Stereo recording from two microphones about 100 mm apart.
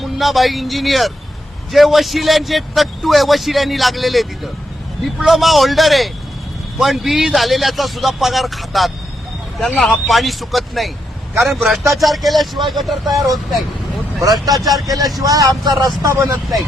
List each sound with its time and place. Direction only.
0.2 s a man's voice: centre (ahead or behind)
14.2 s speech: 40° right (ahead or behind)
14.5 s a man's voice: centre (ahead or behind)
14.8 s speech: 35° right (ahead or behind)